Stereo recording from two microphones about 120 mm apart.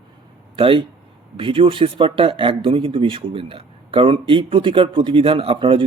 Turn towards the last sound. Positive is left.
turn(degrees=-45)  # may be behind; listen again after turning